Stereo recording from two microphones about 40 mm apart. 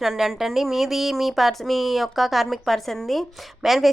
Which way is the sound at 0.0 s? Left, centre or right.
Centre.